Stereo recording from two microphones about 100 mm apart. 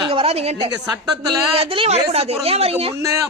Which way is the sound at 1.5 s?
70° right (ahead or behind).